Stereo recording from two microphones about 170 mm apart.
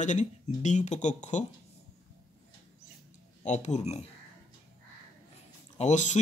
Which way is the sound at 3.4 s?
45° left (ahead or behind).